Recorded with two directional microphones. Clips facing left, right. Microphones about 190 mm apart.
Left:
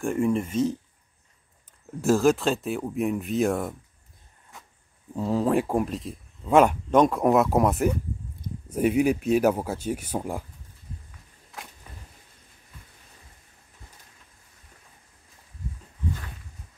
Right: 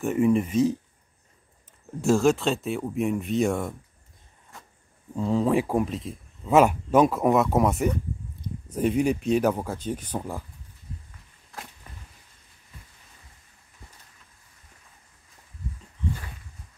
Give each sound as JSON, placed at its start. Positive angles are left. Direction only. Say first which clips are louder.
{"t": 0.0, "sound": "speech", "louder": "right 2 dB", "side_deg": -5}
{"t": 2.0, "sound": "speech", "louder": "even", "side_deg": 0}
{"t": 5.1, "sound": "speech", "louder": "even", "side_deg": 0}